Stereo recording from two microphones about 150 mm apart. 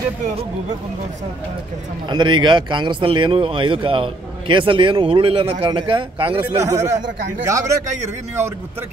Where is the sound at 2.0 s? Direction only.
30° right (ahead or behind).